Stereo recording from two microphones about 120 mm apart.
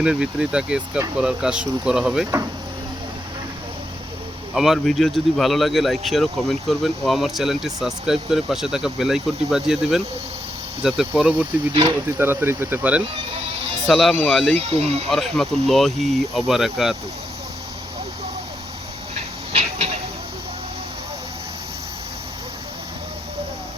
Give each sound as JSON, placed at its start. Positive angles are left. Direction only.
{"t": 0.0, "sound": "speech", "side_deg": -10}
{"t": 4.5, "sound": "speech", "side_deg": -5}
{"t": 13.8, "sound": "speech", "side_deg": 5}
{"t": 14.6, "sound": "speech", "side_deg": -60}
{"t": 15.1, "sound": "speech", "side_deg": 0}